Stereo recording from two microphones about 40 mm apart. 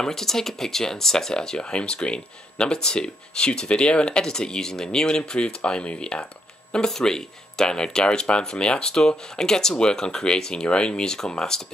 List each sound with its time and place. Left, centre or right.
0.0 s speech: centre; by 6.2 s left
6.7 s speech: centre